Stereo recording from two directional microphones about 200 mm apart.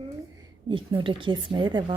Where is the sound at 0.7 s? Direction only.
25° right (ahead or behind).